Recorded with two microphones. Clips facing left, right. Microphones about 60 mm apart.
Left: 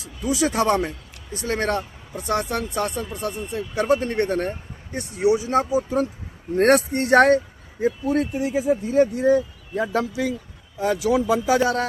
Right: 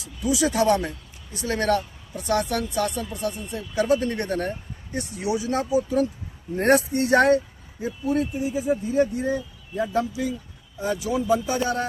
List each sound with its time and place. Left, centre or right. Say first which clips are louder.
0.0 s speech: left 1 dB; left
6.6 s speech: left 2 dB; left